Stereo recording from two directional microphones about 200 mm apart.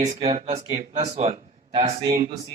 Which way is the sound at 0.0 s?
35° right (ahead or behind).